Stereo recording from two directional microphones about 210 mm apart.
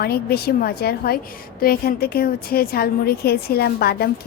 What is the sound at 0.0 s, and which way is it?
A woman's voice, 45° left (ahead or behind).